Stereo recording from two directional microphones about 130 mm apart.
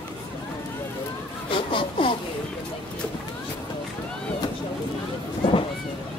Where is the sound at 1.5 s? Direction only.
40° left (ahead or behind).